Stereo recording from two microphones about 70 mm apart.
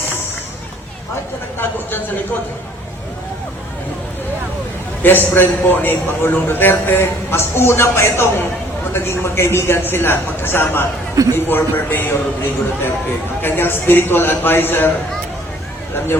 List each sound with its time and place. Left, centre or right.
1.5 s a man's voice: left
5.0 s a man's voice: left
11.1 s speech: right
11.3 s a man's voice: left